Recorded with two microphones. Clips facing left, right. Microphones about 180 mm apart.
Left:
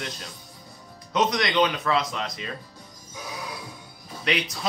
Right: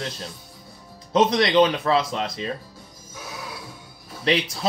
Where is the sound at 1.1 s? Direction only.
30° right (ahead or behind).